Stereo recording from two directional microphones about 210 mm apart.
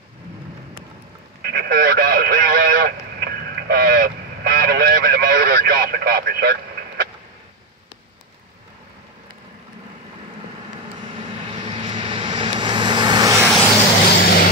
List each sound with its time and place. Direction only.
1.4 s radio: 50° right (ahead or behind)
11.5 s vehicle: 25° right (ahead or behind)
14.2 s vehicle: 45° left (ahead or behind)